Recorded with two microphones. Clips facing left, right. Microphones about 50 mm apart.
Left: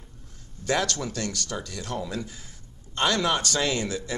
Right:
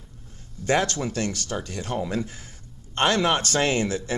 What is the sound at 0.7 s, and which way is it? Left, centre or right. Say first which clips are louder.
A man's voice: right 3 dB; right.